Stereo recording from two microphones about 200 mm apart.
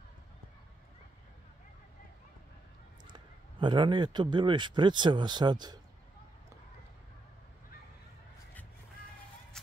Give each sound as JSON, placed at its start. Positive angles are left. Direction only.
{"t": 3.1, "sound": "a man's voice", "side_deg": -25}